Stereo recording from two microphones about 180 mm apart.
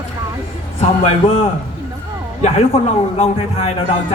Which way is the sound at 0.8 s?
40° left (ahead or behind).